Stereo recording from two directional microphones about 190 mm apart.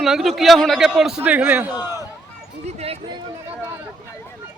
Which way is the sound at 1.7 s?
20° left (ahead or behind).